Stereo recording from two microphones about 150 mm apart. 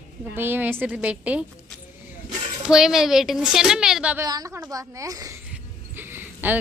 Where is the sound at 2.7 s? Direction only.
5° right (ahead or behind).